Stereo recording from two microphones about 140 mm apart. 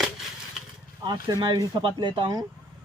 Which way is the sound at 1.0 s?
30° right (ahead or behind).